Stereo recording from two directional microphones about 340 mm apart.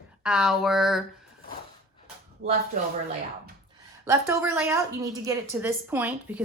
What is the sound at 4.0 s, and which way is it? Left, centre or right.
A woman's voice, centre.